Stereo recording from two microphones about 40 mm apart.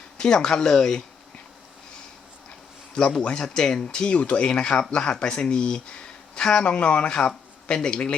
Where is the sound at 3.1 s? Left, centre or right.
Centre.